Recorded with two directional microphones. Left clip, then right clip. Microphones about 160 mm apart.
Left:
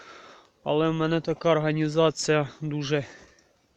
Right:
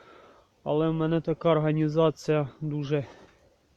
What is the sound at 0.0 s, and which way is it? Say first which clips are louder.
Speech: left 6 dB; 5° right (ahead or behind).